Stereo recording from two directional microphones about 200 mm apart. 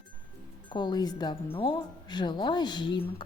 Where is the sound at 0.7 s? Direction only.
20° left (ahead or behind).